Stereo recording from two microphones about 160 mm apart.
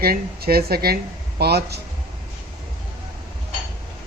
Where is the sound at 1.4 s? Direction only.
90° right.